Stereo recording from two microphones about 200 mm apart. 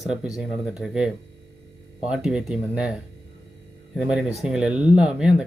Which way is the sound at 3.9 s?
5° right (ahead or behind).